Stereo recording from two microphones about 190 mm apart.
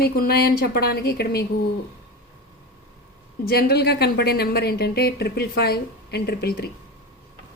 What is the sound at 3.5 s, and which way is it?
A woman's voice, 55° left (ahead or behind).